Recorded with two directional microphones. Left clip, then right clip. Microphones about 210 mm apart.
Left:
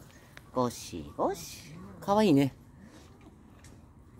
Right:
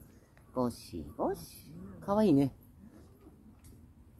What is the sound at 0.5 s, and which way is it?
Speech, 20° left (ahead or behind).